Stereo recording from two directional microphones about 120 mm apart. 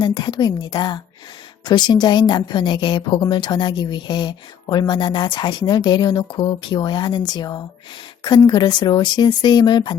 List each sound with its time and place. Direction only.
0.0 s a woman's voice: 40° left (ahead or behind)